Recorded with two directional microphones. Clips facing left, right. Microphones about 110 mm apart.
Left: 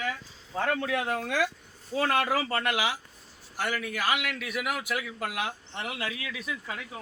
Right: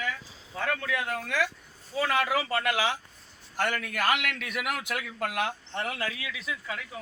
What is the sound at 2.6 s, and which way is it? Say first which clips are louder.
A man's voice: right 1 dB; 15° left (ahead or behind).